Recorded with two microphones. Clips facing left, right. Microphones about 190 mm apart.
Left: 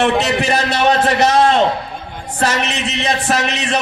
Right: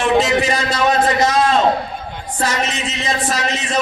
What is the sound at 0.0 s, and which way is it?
A man's voice, 65° left (ahead or behind).